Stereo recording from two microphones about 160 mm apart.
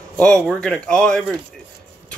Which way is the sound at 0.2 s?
5° left (ahead or behind).